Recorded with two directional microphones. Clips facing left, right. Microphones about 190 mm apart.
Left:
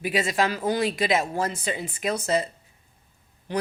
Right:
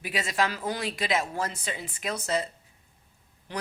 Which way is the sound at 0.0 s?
10° left (ahead or behind).